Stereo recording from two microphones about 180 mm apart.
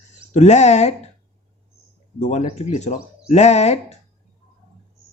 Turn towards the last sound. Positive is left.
turn(degrees=40)  # may be behind; listen again after turning